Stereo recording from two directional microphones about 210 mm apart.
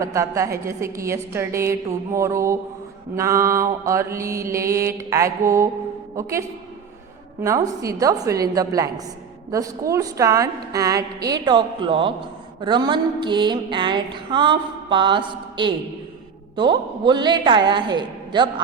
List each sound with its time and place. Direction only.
0.0 s a woman's voice: 15° right (ahead or behind)
7.4 s a woman's voice: 15° right (ahead or behind)
12.5 s a sound: 20° right (ahead or behind)